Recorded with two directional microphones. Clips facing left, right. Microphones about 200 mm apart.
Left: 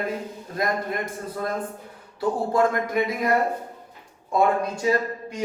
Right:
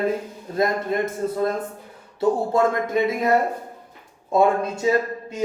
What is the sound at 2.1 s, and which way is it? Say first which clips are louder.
Speech: right 3 dB; 25° right (ahead or behind).